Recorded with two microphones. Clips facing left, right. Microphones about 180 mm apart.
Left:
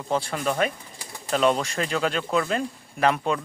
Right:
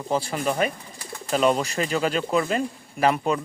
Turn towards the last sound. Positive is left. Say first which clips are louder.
# right 1 dB
turn(degrees=-5)  # may be behind; listen again after turning